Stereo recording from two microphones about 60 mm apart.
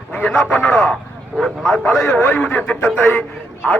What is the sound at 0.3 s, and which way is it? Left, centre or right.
Speech, centre.